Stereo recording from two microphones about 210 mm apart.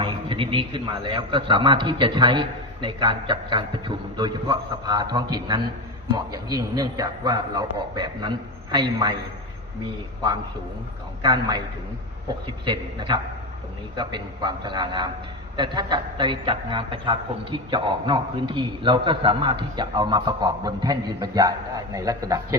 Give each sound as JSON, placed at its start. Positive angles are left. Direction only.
{"t": 0.0, "sound": "a man's voice", "side_deg": -25}
{"t": 6.3, "sound": "a man's voice", "side_deg": -15}
{"t": 11.2, "sound": "a man's voice", "side_deg": -20}
{"t": 12.6, "sound": "a man's voice", "side_deg": -20}